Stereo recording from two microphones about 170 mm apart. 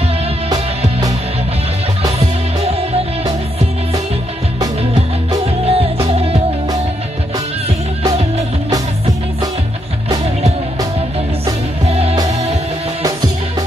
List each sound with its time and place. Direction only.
2.1 s music: 35° right (ahead or behind)
5.7 s music: 35° right (ahead or behind)
11.9 s music: 35° right (ahead or behind)